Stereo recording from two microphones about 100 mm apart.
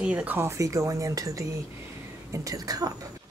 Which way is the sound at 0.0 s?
15° right (ahead or behind).